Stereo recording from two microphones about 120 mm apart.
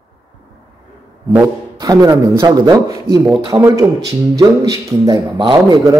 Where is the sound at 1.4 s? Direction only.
35° right (ahead or behind).